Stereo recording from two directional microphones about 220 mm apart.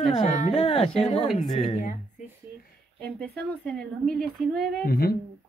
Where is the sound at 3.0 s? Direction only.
5° left (ahead or behind).